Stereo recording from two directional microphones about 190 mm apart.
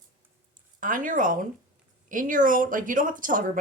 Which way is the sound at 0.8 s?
45° right (ahead or behind).